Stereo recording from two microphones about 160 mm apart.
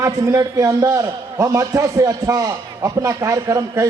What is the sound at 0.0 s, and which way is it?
A man's voice, 20° right (ahead or behind).